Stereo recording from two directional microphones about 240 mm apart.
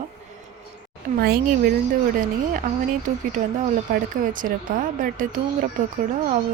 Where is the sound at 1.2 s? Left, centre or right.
Right.